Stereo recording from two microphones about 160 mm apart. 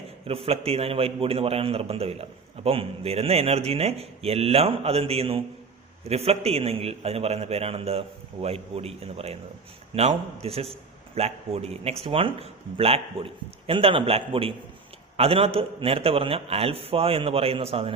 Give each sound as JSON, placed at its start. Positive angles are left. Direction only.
{"t": 0.3, "sound": "a man's voice", "side_deg": -35}